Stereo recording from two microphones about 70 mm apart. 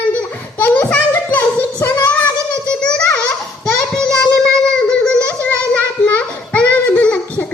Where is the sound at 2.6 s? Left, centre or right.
Centre.